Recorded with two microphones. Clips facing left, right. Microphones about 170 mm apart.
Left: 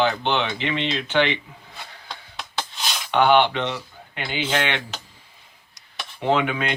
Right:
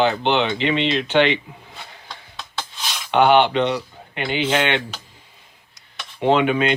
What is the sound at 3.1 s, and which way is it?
Speech, 20° right (ahead or behind).